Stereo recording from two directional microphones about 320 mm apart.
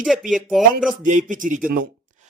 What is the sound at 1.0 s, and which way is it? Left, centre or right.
Speech, right.